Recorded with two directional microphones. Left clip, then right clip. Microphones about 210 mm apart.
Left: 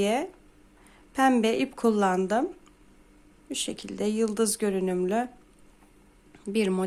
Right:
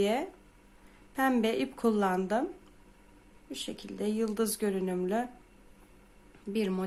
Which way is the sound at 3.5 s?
30° left (ahead or behind).